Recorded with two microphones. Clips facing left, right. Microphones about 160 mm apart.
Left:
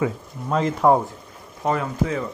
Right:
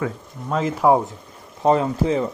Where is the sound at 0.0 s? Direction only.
Centre (ahead or behind).